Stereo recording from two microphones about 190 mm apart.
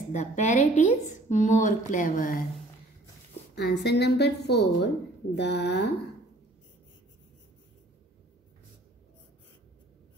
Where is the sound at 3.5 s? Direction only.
60° left (ahead or behind).